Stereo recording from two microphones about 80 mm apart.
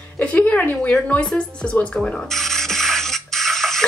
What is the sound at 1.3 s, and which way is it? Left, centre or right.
Music, centre.